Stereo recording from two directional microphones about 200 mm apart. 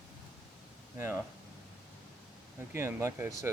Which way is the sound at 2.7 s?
15° right (ahead or behind).